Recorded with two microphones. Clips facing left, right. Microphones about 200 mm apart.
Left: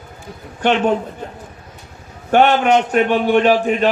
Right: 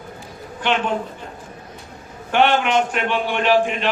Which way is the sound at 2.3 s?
40° left (ahead or behind).